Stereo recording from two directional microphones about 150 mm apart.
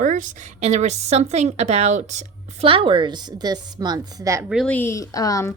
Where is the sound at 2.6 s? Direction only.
35° right (ahead or behind).